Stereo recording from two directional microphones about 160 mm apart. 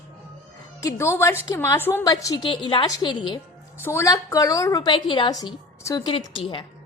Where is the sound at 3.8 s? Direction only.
15° left (ahead or behind); by 6.7 s 30° left (ahead or behind).